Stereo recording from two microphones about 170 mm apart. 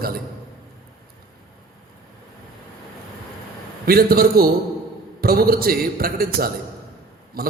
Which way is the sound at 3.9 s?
60° right (ahead or behind).